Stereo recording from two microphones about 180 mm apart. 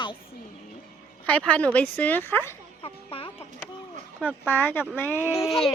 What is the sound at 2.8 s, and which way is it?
Music, 30° left (ahead or behind).